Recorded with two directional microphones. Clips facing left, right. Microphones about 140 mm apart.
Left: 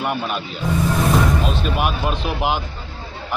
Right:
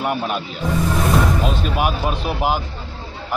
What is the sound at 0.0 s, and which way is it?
Speech, centre (ahead or behind).